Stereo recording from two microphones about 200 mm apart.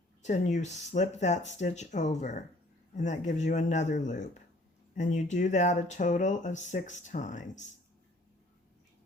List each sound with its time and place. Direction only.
0.2 s speech: 35° left (ahead or behind)